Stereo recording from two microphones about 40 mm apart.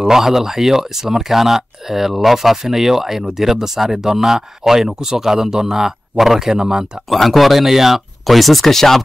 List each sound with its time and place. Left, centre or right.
0.0 s speech: centre
6.5 s speech: centre
7.1 s speech: centre